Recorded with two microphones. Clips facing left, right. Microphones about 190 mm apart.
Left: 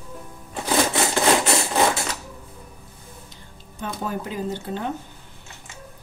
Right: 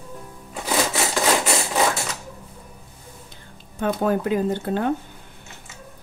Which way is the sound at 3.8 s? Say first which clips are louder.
Right 8 dB; 60° right (ahead or behind).